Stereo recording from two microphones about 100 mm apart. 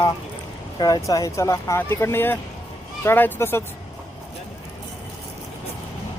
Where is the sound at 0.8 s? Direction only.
40° left (ahead or behind); by 3.6 s 25° left (ahead or behind).